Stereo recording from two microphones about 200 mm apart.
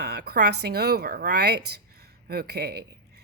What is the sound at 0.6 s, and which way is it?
Speech, 50° right (ahead or behind).